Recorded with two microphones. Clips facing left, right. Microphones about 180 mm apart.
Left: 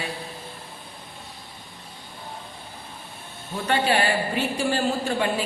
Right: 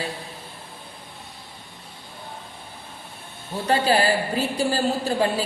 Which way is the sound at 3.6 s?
35° right (ahead or behind).